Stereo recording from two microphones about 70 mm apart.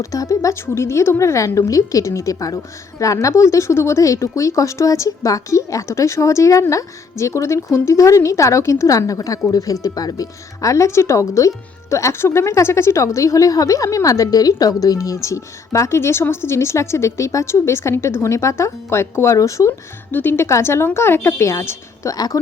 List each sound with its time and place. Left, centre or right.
0.0 s speech: left
20.1 s speech: left
22.1 s speech: left